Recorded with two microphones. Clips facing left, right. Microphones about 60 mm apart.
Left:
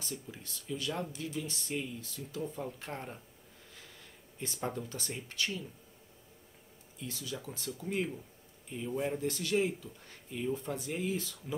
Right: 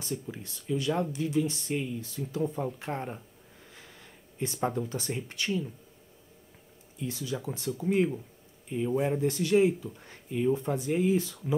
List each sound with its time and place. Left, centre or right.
0.3 s speech: right
3.7 s a sound: centre
4.6 s speech: centre
7.0 s speech: centre
9.3 s speech: centre